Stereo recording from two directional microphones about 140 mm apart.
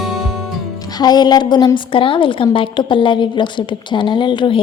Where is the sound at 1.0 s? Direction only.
30° left (ahead or behind).